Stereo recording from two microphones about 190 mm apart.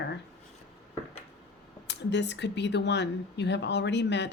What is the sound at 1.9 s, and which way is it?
Speech, 65° left (ahead or behind).